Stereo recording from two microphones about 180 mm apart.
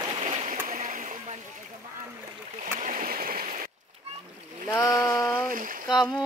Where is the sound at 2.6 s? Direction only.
45° right (ahead or behind).